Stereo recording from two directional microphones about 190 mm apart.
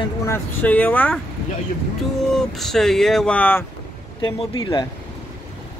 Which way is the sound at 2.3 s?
Centre (ahead or behind).